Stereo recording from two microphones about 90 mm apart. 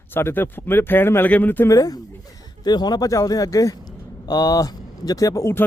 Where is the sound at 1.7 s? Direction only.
40° left (ahead or behind).